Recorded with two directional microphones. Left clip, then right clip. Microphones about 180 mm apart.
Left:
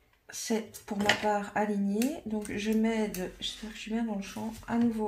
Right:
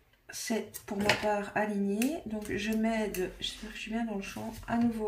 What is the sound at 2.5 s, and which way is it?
Speech, 20° left (ahead or behind).